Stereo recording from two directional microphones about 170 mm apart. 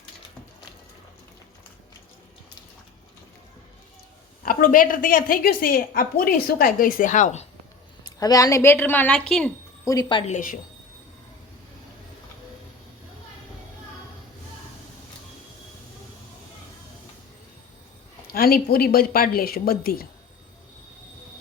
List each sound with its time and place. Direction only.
4.4 s a woman's voice: 55° left (ahead or behind)
8.2 s a woman's voice: 20° left (ahead or behind)
9.8 s speech: 20° left (ahead or behind)
10.3 s a woman's voice: 50° left (ahead or behind)
18.3 s a woman's voice: 60° left (ahead or behind)